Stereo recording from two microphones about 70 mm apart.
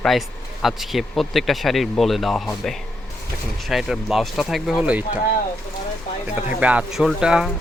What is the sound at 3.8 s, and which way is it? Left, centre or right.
Speech, centre.